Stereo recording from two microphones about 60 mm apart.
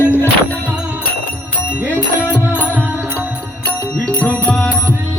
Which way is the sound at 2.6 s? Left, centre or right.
Left.